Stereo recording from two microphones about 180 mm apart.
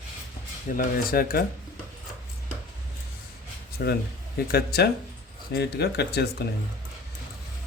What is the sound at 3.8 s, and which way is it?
Speech, 65° left (ahead or behind).